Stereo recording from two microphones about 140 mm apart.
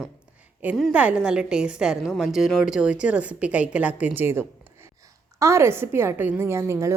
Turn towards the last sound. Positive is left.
turn(degrees=-20)  # may be behind; listen again after turning